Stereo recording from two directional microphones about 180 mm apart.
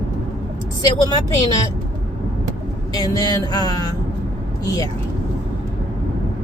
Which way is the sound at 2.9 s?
20° left (ahead or behind).